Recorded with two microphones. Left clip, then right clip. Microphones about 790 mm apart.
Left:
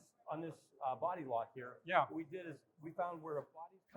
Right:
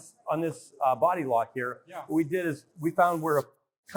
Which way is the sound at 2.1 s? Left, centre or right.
Right.